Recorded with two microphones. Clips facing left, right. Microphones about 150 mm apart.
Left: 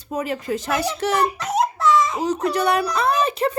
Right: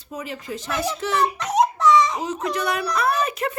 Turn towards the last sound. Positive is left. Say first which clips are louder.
# left 3 dB
turn(degrees=30)  # may be behind; listen again after turning